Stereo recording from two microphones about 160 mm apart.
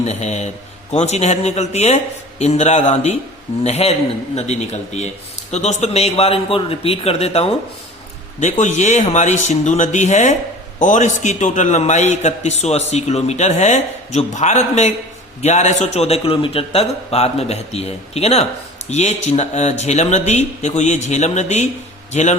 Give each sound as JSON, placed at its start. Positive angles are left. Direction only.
{"t": 0.0, "sound": "a man's voice", "side_deg": 45}